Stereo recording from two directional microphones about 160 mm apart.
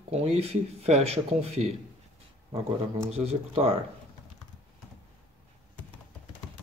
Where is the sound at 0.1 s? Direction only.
40° right (ahead or behind).